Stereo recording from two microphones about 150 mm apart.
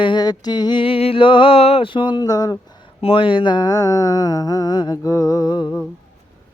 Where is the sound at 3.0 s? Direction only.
35° left (ahead or behind).